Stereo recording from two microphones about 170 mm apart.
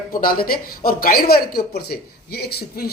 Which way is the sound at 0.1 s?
60° left (ahead or behind).